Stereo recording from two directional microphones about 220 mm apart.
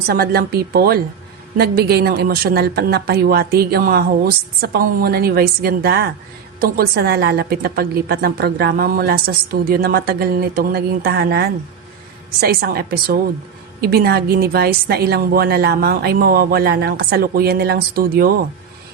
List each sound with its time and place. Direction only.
0.1 s a woman's voice: 45° right (ahead or behind)